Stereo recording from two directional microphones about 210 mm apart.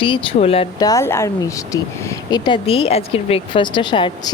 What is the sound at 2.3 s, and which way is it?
A woman's voice, 25° left (ahead or behind).